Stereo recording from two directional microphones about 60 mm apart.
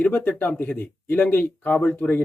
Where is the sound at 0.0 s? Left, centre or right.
Left.